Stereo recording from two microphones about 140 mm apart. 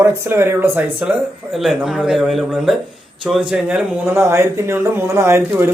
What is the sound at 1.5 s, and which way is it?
Speech, centre (ahead or behind).